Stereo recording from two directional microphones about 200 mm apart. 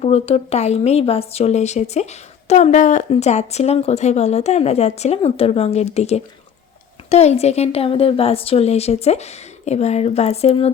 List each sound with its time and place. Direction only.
0.0 s speech: 30° left (ahead or behind)